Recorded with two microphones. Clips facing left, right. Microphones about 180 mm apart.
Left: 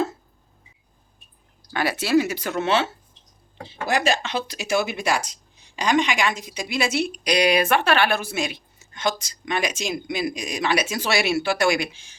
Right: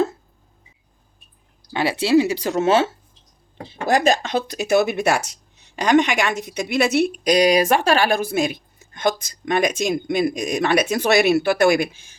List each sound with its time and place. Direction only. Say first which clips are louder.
1.7 s speech: right 3 dB; 25° right (ahead or behind)
3.8 s a woman's voice: right 5 dB; 45° right (ahead or behind)